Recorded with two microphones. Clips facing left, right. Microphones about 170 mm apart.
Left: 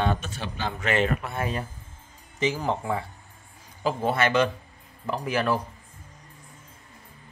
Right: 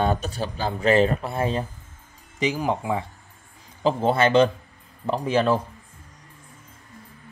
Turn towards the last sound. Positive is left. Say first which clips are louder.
# right 5 dB
turn(degrees=-25)  # may be behind; listen again after turning